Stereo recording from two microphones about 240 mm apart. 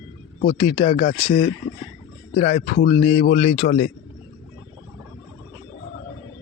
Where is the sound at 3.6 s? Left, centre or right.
Left.